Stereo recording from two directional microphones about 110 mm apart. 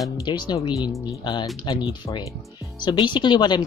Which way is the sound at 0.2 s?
40° left (ahead or behind).